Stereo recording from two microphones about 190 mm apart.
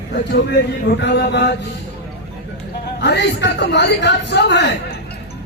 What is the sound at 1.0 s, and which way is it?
Speech, 65° left (ahead or behind).